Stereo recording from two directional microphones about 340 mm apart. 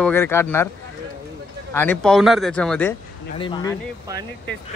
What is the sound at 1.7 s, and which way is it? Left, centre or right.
A man's voice, centre.